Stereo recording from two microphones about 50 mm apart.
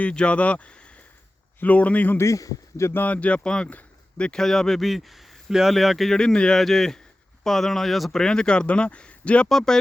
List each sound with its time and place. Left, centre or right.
0.0 s speech: left
2.1 s a man's voice: left
3.1 s a man's voice: left; by 6.1 s centre
6.1 s speech: centre
6.6 s speech: centre
8.2 s speech: centre
9.5 s speech: centre